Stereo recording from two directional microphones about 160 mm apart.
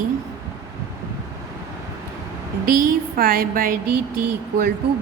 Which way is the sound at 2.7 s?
60° right (ahead or behind).